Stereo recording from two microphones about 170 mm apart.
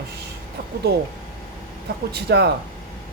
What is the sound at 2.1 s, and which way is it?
Speech, 70° right (ahead or behind).